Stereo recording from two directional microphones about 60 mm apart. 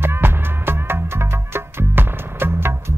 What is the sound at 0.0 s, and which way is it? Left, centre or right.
Music, right.